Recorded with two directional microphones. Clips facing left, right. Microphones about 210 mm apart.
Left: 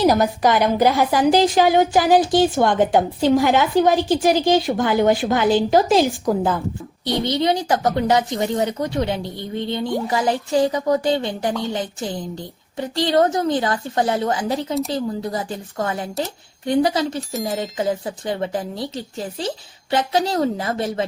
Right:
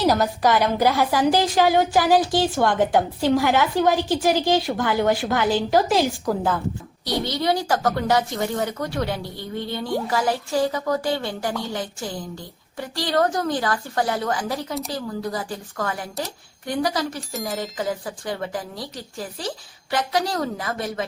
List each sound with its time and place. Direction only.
0.0 s a woman's voice: 15° left (ahead or behind)